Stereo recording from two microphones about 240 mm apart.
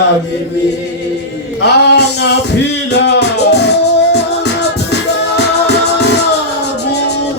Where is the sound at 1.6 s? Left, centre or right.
Left.